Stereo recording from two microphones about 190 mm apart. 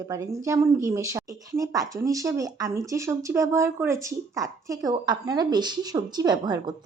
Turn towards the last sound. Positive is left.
turn(degrees=-20)  # may be behind; listen again after turning